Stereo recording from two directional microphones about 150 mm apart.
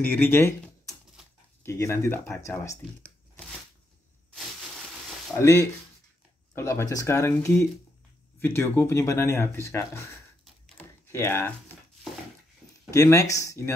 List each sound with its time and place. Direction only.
0.0 s speech: 10° left (ahead or behind)
6.5 s speech: 20° left (ahead or behind)
10.8 s a sound: 15° left (ahead or behind)
12.9 s speech: 20° left (ahead or behind)